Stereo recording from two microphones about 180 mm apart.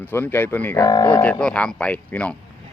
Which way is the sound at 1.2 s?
5° left (ahead or behind).